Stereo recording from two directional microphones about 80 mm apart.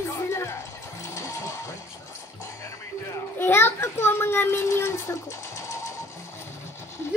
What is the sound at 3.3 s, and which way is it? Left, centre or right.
A child's voice, left.